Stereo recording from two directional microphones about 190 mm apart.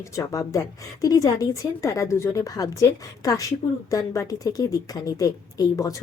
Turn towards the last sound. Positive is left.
turn(degrees=20)  # may be behind; listen again after turning